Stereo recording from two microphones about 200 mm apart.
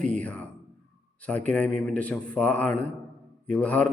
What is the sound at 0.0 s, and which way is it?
A man's voice, 5° left (ahead or behind).